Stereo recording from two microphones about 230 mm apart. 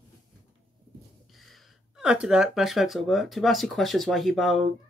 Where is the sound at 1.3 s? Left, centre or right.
Centre.